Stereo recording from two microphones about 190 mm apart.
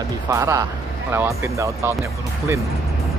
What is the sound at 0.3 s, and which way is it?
Speech, 15° right (ahead or behind).